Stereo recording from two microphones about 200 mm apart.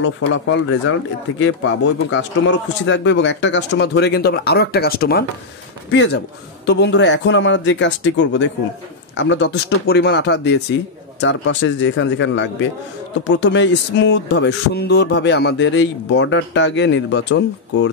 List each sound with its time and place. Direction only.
0.0 s a man's voice: 70° left (ahead or behind)